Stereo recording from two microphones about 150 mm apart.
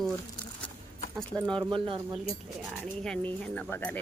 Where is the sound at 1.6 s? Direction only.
35° right (ahead or behind).